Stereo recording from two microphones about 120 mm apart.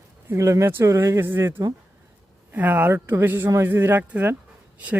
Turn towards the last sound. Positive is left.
turn(degrees=-15)  # may be behind; listen again after turning